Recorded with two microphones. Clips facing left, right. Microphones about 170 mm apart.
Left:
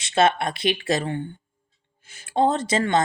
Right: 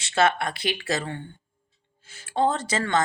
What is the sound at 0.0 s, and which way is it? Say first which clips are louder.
Speech: left 2 dB; 20° left (ahead or behind).